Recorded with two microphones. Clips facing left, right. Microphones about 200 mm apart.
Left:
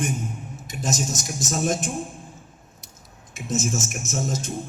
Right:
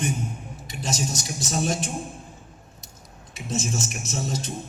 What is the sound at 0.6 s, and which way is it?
A man's voice, 50° left (ahead or behind).